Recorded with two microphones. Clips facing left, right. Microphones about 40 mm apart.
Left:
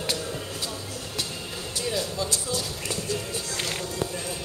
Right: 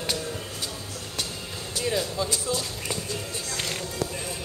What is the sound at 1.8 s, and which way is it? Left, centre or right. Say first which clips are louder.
Music: right 2 dB; centre.